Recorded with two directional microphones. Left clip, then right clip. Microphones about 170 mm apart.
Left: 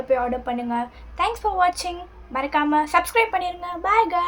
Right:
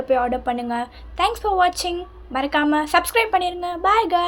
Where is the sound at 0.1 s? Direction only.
20° right (ahead or behind).